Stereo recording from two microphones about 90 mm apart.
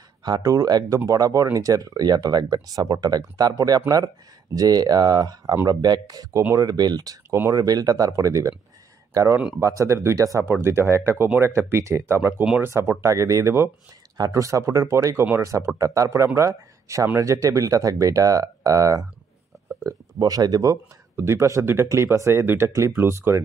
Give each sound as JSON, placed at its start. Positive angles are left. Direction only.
{"t": 0.4, "sound": "speech", "side_deg": -40}
{"t": 7.2, "sound": "speech", "side_deg": -25}
{"t": 7.5, "sound": "speech", "side_deg": -45}
{"t": 9.6, "sound": "speech", "side_deg": -35}
{"t": 20.2, "sound": "speech", "side_deg": -45}
{"t": 21.2, "sound": "speech", "side_deg": -30}